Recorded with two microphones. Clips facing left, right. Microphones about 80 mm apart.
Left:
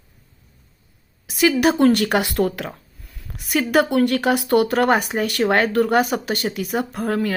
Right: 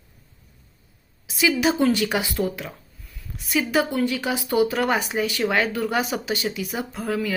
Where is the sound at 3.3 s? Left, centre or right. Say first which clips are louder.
Left 2 dB; left.